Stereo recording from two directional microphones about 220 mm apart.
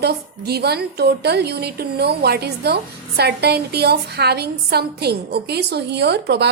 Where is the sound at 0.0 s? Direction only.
45° right (ahead or behind).